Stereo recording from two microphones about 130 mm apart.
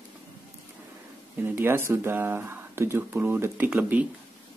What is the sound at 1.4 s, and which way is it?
Speech, 15° right (ahead or behind).